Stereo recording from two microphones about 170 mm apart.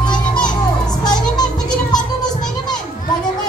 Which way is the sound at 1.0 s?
25° left (ahead or behind).